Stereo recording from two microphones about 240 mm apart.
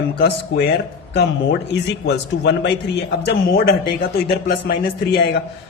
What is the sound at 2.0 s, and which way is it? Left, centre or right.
A man's voice, left.